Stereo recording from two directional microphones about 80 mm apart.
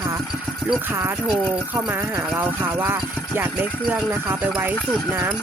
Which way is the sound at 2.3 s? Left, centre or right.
Right.